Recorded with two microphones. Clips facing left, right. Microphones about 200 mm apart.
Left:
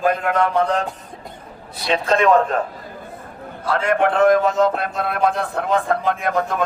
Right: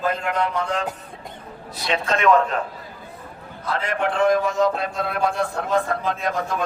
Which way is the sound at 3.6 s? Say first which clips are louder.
Left 6 dB; 50° left (ahead or behind).